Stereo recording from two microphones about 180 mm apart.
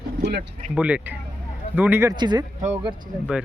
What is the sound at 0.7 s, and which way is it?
Speech, 10° right (ahead or behind).